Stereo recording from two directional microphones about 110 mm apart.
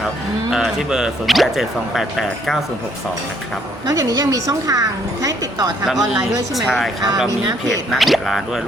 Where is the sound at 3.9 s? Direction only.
35° right (ahead or behind).